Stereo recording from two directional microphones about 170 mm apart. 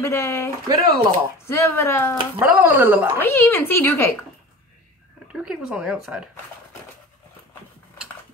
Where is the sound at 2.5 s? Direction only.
10° right (ahead or behind).